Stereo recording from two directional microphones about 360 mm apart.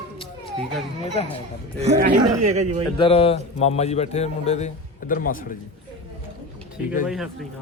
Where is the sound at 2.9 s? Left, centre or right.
Centre.